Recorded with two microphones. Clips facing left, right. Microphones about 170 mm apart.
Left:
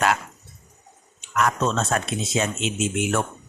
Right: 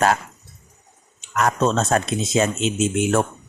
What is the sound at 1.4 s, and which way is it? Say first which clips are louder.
A man's voice: right 3 dB; 35° right (ahead or behind).